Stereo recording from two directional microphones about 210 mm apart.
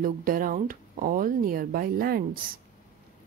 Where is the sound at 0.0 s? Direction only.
40° right (ahead or behind).